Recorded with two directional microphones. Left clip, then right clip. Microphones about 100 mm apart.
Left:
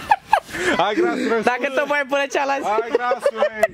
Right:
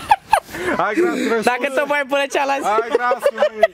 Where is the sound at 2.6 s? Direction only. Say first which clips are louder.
Right 3 dB; 50° right (ahead or behind).